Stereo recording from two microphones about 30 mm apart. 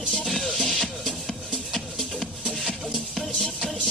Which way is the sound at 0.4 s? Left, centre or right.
Centre.